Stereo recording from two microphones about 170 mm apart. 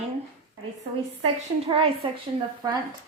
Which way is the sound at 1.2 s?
35° right (ahead or behind).